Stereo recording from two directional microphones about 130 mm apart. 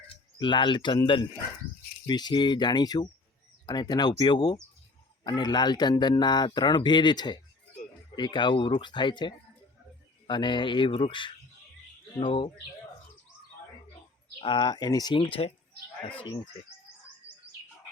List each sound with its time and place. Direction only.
0.3 s speech: 35° left (ahead or behind)
14.4 s speech: 35° left (ahead or behind)